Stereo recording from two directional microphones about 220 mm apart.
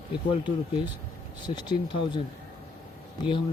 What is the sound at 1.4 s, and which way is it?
Speech, 20° left (ahead or behind).